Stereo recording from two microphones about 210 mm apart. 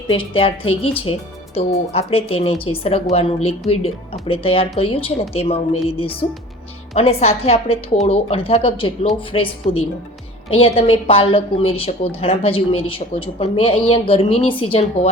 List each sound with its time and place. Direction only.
0.1 s speech: 25° left (ahead or behind)